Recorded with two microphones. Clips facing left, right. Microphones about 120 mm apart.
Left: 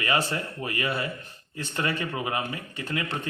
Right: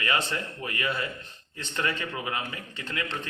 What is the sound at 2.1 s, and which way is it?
Speech, 30° left (ahead or behind).